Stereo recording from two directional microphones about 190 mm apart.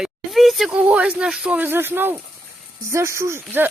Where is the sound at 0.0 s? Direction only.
Centre (ahead or behind).